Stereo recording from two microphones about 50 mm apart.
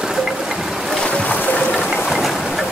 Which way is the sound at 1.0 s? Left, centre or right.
Left.